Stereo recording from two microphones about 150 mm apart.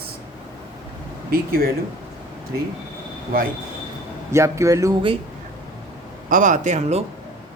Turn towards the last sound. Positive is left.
turn(degrees=-50)  # may be behind; listen again after turning